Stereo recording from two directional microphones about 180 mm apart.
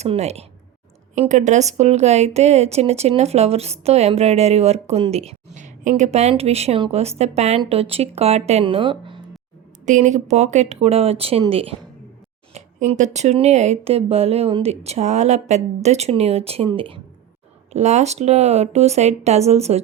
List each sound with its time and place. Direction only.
0.0 s a woman's voice: 35° right (ahead or behind)
9.8 s a woman's voice: 40° right (ahead or behind)